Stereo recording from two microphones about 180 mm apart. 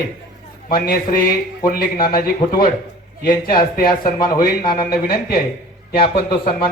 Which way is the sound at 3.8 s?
50° left (ahead or behind).